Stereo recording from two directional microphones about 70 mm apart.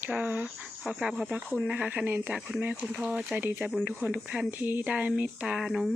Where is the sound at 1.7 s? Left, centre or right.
Centre.